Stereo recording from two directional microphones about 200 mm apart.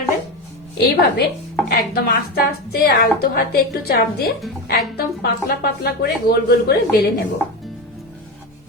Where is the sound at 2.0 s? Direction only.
50° left (ahead or behind).